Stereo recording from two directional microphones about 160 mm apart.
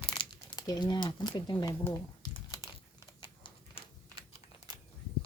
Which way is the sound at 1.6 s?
25° left (ahead or behind).